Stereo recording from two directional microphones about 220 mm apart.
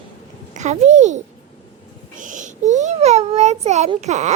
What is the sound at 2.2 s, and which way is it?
A child's voice, 35° right (ahead or behind).